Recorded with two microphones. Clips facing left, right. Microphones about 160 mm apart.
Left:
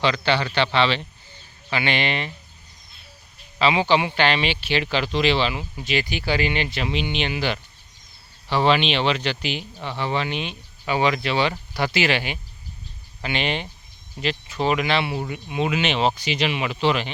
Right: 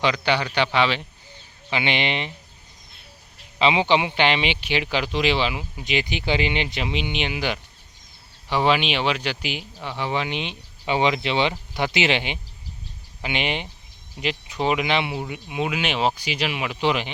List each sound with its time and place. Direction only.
0.0 s speech: 15° right (ahead or behind)
3.6 s speech: 20° right (ahead or behind)